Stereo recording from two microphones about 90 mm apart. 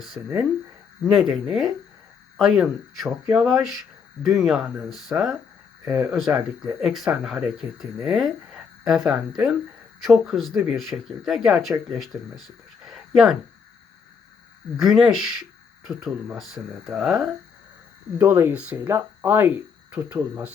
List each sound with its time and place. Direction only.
0.2 s speech: 20° right (ahead or behind)
1.0 s speech: centre (ahead or behind)
5.8 s speech: 20° right (ahead or behind)
6.1 s speech: 5° right (ahead or behind)
12.9 s a sound: 5° right (ahead or behind)
14.8 s speech: 5° right (ahead or behind)
18.2 s speech: 25° right (ahead or behind)
18.5 s speech: 15° right (ahead or behind)
18.9 s speech: 25° right (ahead or behind)